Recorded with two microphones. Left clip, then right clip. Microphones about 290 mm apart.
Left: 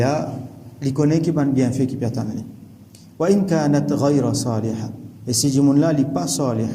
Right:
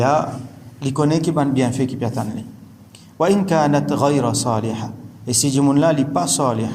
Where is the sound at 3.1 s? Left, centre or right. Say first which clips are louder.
Right 2 dB; centre.